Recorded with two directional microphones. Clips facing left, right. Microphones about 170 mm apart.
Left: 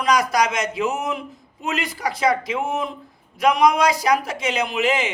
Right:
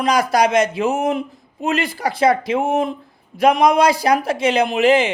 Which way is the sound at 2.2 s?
55° right (ahead or behind).